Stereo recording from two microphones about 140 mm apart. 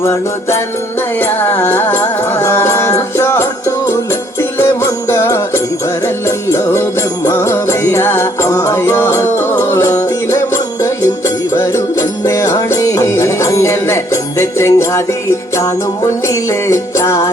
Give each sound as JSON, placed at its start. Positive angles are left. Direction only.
{"t": 0.0, "sound": "music", "side_deg": 20}
{"t": 4.5, "sound": "music", "side_deg": 15}
{"t": 16.6, "sound": "music", "side_deg": 20}